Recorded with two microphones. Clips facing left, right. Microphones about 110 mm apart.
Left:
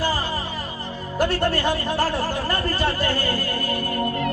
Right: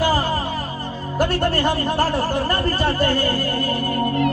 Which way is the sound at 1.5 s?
40° right (ahead or behind).